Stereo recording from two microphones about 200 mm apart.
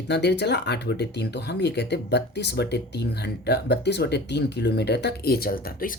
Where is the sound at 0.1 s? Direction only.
60° left (ahead or behind).